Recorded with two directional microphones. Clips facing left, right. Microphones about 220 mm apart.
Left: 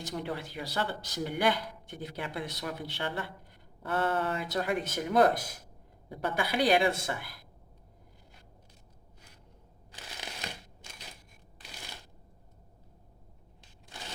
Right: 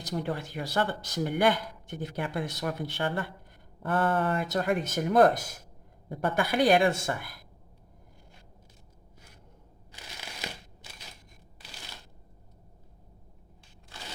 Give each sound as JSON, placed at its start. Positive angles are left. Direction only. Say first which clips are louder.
{"t": 0.0, "sound": "speech", "louder": "right 3 dB", "side_deg": -40}